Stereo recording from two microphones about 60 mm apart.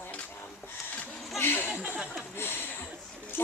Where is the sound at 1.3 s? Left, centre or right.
Left.